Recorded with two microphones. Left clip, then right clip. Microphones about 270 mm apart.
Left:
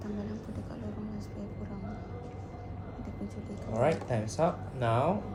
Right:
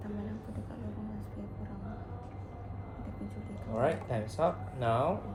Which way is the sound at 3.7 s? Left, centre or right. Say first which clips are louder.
Left 2 dB; left.